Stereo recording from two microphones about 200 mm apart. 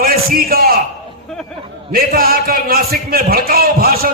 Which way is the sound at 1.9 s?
45° right (ahead or behind).